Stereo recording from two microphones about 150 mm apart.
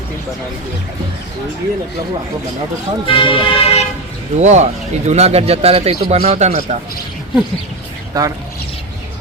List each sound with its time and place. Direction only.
3.1 s speech: 35° left (ahead or behind)
4.4 s speech: 50° right (ahead or behind)
8.1 s speech: 25° right (ahead or behind)